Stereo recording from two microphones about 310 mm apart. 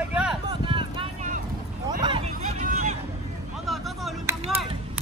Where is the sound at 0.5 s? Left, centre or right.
Centre.